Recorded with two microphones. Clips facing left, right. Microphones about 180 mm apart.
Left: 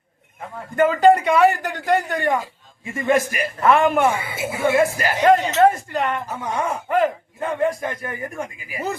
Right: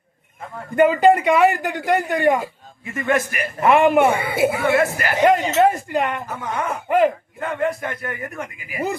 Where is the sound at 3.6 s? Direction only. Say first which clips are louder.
Right 2 dB; 15° right (ahead or behind).